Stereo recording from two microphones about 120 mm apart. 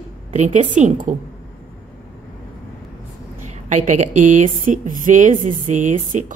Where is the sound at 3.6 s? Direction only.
85° right.